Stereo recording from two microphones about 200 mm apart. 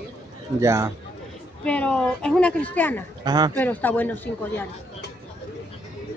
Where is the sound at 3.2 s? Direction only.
20° right (ahead or behind).